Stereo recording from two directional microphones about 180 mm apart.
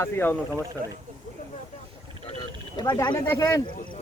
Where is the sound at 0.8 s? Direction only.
50° right (ahead or behind).